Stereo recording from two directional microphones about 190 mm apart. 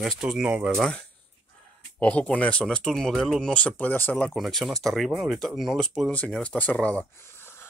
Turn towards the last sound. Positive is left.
turn(degrees=10)  # may be behind; listen again after turning